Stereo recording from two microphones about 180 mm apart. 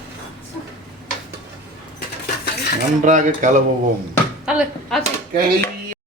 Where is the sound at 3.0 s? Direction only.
45° right (ahead or behind).